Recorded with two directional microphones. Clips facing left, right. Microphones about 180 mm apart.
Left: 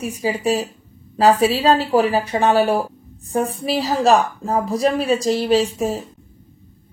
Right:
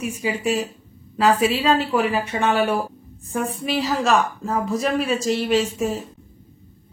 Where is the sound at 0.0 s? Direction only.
35° left (ahead or behind).